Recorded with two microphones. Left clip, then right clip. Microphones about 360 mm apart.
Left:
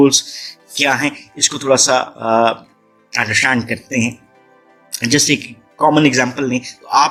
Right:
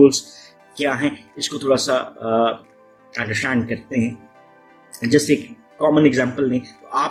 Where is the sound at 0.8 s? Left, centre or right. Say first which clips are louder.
Left 6 dB; centre.